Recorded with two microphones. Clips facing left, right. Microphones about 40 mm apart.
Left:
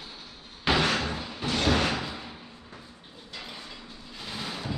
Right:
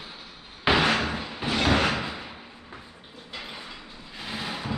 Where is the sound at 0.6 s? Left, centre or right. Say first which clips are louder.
Right 3 dB; centre.